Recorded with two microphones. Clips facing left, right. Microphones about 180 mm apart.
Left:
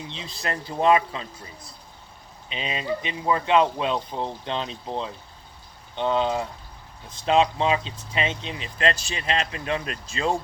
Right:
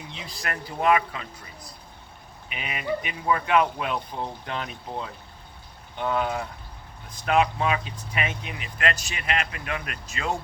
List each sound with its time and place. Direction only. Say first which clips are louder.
0.1 s speech: left 2 dB; 25° left (ahead or behind)